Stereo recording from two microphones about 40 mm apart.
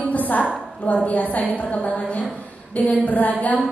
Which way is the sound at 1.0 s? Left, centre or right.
Left.